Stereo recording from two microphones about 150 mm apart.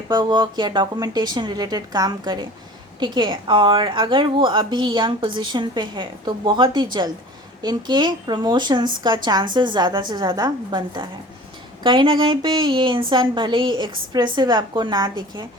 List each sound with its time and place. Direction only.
0.1 s a woman's voice: 30° right (ahead or behind)